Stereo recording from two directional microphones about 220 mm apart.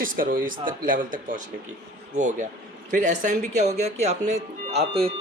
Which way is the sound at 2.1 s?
35° right (ahead or behind).